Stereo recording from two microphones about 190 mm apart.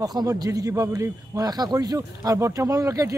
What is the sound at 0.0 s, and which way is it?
A man's voice, 20° right (ahead or behind).